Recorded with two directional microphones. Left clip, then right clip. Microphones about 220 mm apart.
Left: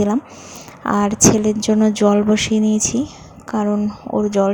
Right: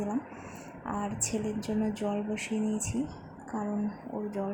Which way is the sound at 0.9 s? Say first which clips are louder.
Left 19 dB; 35° left (ahead or behind).